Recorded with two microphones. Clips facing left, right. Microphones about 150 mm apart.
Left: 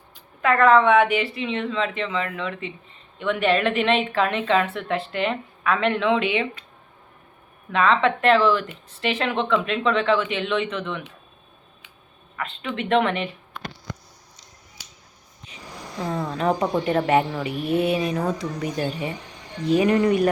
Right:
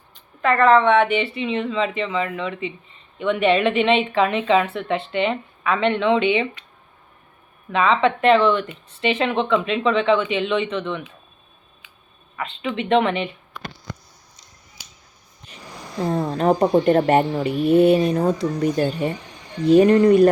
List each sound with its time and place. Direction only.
0.4 s speech: 5° left (ahead or behind)
7.7 s speech: centre (ahead or behind)
12.4 s speech: centre (ahead or behind)
16.0 s speech: 30° right (ahead or behind)
17.7 s speech: centre (ahead or behind)
18.1 s speech: 30° right (ahead or behind)